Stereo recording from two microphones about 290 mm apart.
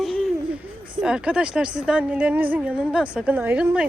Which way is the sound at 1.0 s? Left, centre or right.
Centre.